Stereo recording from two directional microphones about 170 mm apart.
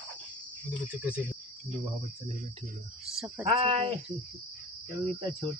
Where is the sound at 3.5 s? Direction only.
35° right (ahead or behind).